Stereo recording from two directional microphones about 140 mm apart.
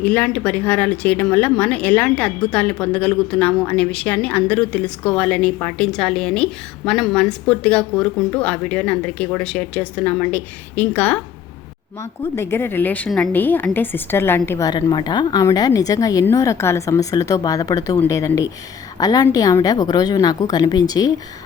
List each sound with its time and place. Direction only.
0.0 s a woman's voice: 10° left (ahead or behind)
13.1 s a woman's voice: centre (ahead or behind)
13.3 s a woman's voice: 15° left (ahead or behind)
14.7 s a woman's voice: 30° left (ahead or behind)